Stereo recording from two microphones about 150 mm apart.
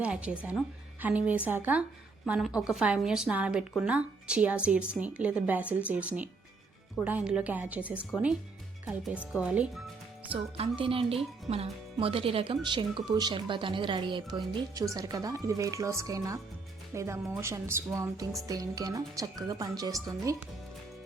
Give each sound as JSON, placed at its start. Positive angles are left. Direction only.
{"t": 0.0, "sound": "a woman's voice", "side_deg": -10}
{"t": 10.3, "sound": "a woman's voice", "side_deg": -35}